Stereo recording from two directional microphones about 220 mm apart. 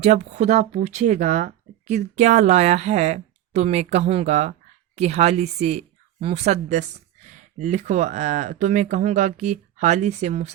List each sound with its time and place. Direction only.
0.0 s speech: 30° right (ahead or behind)